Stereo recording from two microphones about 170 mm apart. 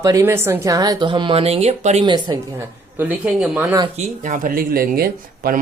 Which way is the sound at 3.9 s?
45° right (ahead or behind).